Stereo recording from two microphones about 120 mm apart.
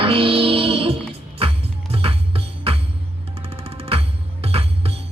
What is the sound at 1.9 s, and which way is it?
Music, 50° right (ahead or behind).